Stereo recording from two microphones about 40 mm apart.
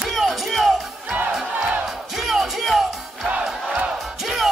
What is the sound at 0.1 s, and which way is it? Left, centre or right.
Music, centre.